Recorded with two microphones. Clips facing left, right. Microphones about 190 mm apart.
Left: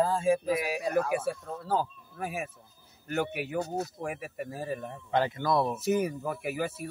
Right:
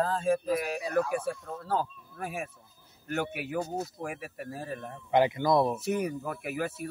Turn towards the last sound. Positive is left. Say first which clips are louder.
# left 1 dB
turn(degrees=0)  # may be behind; listen again after turning